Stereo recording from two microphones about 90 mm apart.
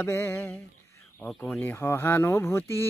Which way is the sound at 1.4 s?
15° left (ahead or behind).